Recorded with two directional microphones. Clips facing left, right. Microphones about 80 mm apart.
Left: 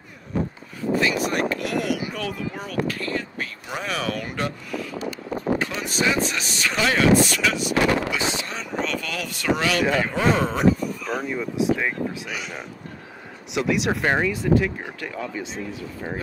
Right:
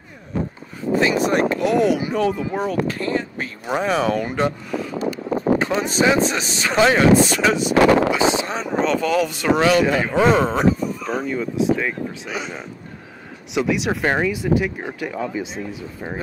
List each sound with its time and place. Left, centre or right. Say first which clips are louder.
0.9 s speech: right 5 dB; right
7.7 s speech: right 8 dB; right
8.1 s speech: right 8 dB; right
11.2 s speech: right 3 dB; centre
12.3 s speech: right 4 dB; right
13.5 s speech: right 2 dB; centre